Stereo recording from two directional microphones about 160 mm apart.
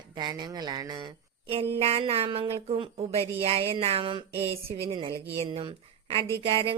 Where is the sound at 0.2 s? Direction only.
25° right (ahead or behind).